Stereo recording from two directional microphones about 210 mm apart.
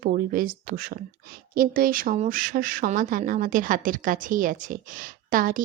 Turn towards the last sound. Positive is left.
turn(degrees=-40)  # may be behind; listen again after turning